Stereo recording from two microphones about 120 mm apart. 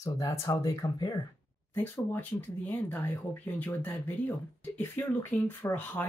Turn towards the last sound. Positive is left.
turn(degrees=15)  # may be behind; listen again after turning